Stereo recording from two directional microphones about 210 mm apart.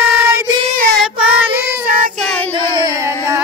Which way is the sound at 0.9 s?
Centre (ahead or behind).